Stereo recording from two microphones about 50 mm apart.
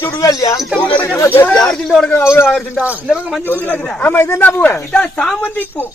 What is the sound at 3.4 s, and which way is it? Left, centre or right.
A woman's voice, left.